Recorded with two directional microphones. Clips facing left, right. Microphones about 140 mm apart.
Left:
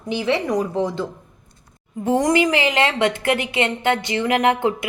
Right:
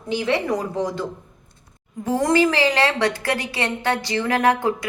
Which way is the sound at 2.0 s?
15° left (ahead or behind).